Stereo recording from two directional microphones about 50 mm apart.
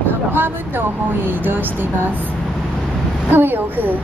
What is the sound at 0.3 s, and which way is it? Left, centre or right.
Speech, right.